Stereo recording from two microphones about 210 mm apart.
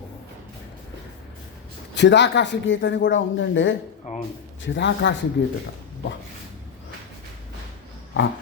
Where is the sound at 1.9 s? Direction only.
55° left (ahead or behind).